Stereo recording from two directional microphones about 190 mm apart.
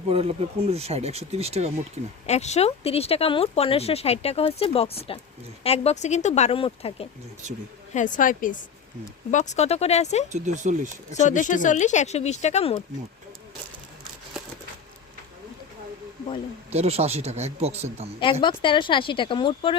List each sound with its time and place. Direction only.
0.1 s speech: 30° right (ahead or behind)
2.2 s speech: 35° left (ahead or behind)
7.9 s a woman's voice: 45° left (ahead or behind)
10.3 s speech: 40° right (ahead or behind)
11.1 s speech: 40° left (ahead or behind)
16.7 s speech: 35° right (ahead or behind)
18.2 s speech: 25° left (ahead or behind)